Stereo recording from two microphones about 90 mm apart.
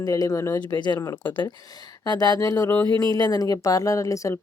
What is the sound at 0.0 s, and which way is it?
Speech, 40° left (ahead or behind).